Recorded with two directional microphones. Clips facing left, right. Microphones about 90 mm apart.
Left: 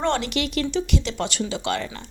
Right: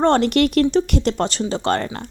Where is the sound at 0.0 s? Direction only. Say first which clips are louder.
Right 8 dB; 45° right (ahead or behind).